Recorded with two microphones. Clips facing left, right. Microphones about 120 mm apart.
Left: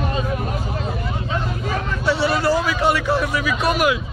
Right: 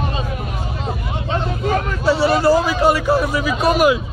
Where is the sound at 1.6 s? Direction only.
45° right (ahead or behind).